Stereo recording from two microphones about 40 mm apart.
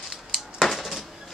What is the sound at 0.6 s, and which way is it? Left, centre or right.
Dishes, centre.